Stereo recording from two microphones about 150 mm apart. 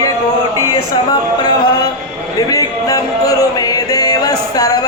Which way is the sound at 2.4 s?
25° left (ahead or behind).